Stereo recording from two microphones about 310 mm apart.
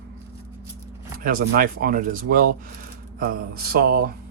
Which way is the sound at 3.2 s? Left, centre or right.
Right.